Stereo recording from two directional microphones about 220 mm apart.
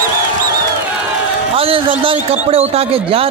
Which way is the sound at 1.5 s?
25° right (ahead or behind).